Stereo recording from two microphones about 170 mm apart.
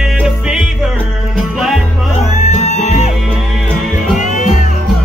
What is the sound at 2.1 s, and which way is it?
Music, 40° left (ahead or behind).